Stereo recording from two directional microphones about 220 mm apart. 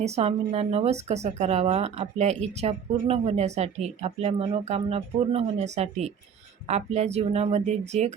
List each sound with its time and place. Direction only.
0.0 s speech: 30° right (ahead or behind)